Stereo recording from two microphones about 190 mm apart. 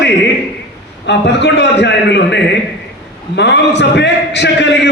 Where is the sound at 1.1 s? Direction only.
65° left (ahead or behind).